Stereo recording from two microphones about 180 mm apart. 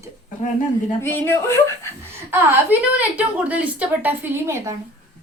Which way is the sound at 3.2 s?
10° right (ahead or behind).